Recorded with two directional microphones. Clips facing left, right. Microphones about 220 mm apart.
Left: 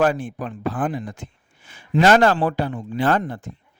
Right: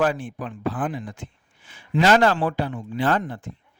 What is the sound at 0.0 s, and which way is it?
Speech, 45° left (ahead or behind).